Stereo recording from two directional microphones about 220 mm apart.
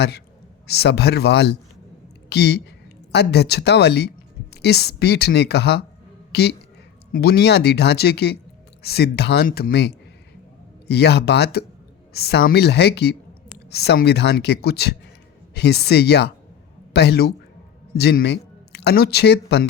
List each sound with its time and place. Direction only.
0.7 s speech: 50° left (ahead or behind)